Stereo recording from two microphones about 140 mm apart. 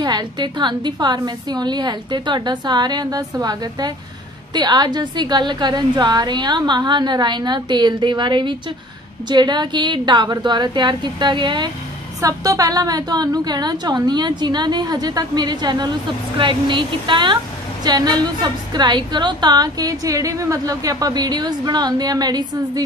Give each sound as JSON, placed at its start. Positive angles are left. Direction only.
{"t": 0.0, "sound": "a woman's voice", "side_deg": -30}